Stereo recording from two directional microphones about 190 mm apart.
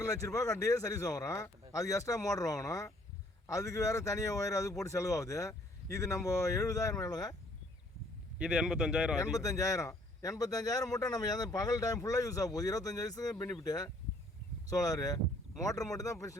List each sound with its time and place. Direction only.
0.0 s speech: 15° left (ahead or behind)
8.4 s speech: 5° right (ahead or behind)
9.1 s a man's voice: 15° left (ahead or behind)